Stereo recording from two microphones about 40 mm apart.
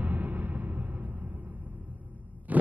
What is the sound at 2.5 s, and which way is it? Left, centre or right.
Heart sounds, right.